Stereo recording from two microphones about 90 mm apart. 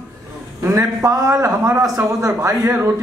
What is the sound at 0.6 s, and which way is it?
A man's voice, 35° right (ahead or behind).